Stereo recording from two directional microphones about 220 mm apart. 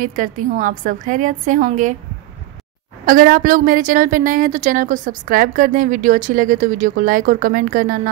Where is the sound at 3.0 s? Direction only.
40° right (ahead or behind).